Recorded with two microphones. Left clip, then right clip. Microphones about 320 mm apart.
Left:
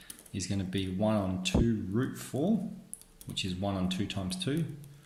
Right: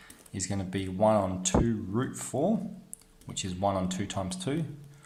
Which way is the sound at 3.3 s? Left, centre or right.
Right.